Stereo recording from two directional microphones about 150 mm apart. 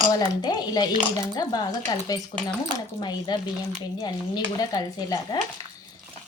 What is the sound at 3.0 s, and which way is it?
Speech, 30° left (ahead or behind).